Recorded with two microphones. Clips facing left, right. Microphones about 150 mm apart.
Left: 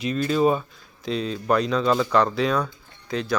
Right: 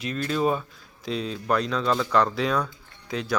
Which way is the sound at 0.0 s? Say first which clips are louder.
Left 4 dB; centre (ahead or behind).